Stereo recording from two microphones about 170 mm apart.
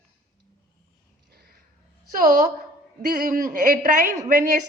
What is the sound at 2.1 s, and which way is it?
A woman's voice, 50° right (ahead or behind).